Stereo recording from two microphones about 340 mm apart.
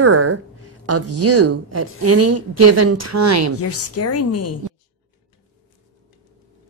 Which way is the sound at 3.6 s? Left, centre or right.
Left.